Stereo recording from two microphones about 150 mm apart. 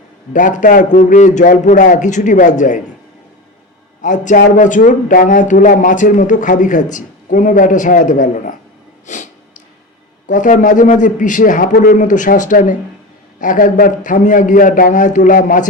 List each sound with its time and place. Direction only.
0.3 s speech: 60° left (ahead or behind)
4.0 s speech: 55° left (ahead or behind)
10.2 s speech: 60° left (ahead or behind)